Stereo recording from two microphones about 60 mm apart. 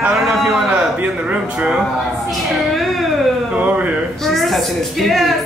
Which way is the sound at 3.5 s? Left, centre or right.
Right.